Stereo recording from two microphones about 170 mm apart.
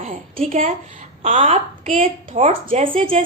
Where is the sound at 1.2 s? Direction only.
40° right (ahead or behind).